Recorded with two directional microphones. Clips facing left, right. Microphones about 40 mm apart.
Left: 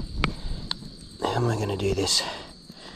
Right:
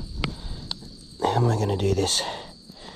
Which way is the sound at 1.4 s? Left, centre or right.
Left.